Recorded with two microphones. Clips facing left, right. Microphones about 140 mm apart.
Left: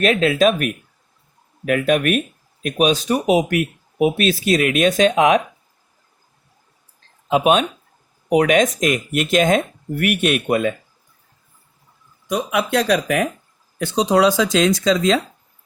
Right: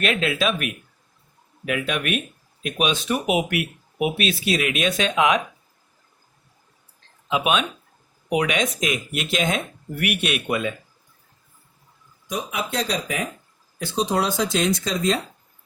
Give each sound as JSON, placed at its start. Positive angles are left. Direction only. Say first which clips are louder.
{"t": 0.0, "sound": "speech", "louder": "left 7 dB", "side_deg": 40}
{"t": 7.3, "sound": "speech", "louder": "left 6 dB", "side_deg": 45}
{"t": 12.3, "sound": "speech", "louder": "left 8 dB", "side_deg": 80}
{"t": 13.7, "sound": "speech", "louder": "left 6 dB", "side_deg": 75}